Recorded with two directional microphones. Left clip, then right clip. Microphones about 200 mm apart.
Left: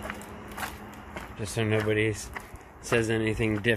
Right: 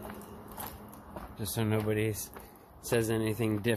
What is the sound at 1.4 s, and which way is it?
Speech, 15° right (ahead or behind).